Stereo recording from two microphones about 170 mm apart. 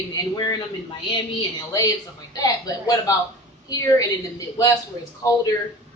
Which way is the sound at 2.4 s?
20° left (ahead or behind).